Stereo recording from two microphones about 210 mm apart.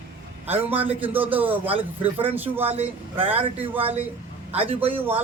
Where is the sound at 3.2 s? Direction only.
25° right (ahead or behind).